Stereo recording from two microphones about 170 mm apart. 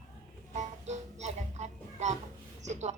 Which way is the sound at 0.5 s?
40° right (ahead or behind).